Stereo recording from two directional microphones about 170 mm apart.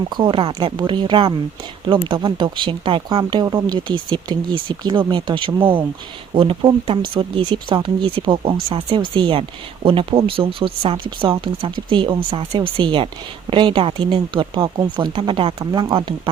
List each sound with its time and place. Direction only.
0.1 s speech: 30° right (ahead or behind)